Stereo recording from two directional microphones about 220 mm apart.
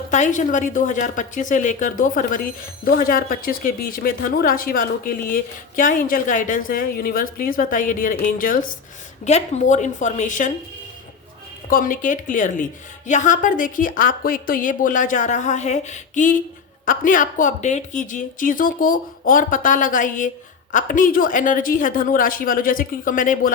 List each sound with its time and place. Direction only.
0.1 s speech: 35° left (ahead or behind)
11.7 s speech: 40° left (ahead or behind)